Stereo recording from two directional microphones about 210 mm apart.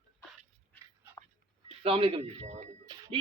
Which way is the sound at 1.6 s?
25° right (ahead or behind).